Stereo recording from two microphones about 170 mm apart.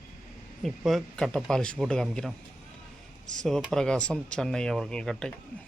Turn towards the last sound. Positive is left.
turn(degrees=5)  # may be behind; listen again after turning